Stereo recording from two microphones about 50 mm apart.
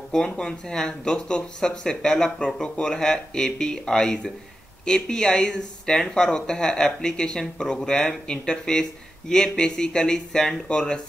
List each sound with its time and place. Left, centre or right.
0.1 s speech: centre